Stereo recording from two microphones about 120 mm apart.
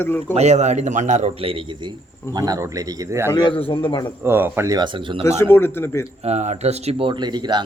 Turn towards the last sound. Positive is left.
turn(degrees=-35)  # may be behind; listen again after turning